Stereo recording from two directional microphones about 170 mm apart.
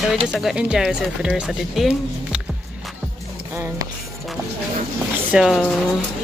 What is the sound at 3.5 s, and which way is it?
Music, 15° right (ahead or behind).